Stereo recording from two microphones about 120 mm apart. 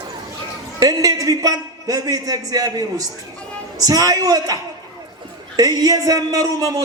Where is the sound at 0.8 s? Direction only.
30° right (ahead or behind).